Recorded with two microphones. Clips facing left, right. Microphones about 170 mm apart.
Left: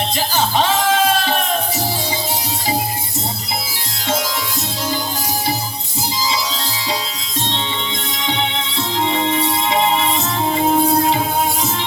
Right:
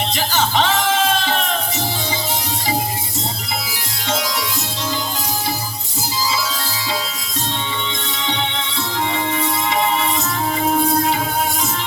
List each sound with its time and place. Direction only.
0.3 s music: 15° left (ahead or behind)
7.5 s music: 20° left (ahead or behind)